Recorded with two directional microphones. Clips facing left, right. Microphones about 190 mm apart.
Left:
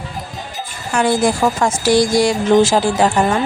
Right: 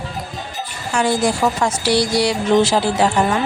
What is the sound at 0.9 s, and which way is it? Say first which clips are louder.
Speech: left 2 dB; 55° left (ahead or behind).